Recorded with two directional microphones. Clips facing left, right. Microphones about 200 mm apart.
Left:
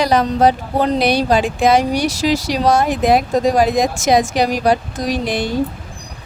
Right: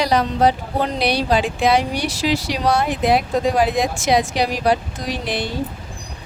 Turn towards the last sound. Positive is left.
turn(degrees=45)  # may be behind; listen again after turning